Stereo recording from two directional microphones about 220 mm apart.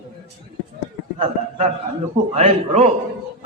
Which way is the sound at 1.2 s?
30° right (ahead or behind).